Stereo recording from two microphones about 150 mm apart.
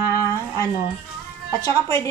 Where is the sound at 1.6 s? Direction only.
20° left (ahead or behind).